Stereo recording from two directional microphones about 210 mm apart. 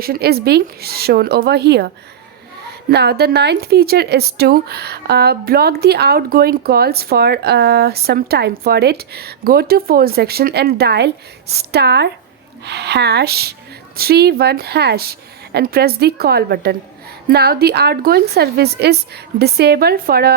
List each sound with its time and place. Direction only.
0.0 s speech: 45° right (ahead or behind)
2.9 s speech: 50° right (ahead or behind)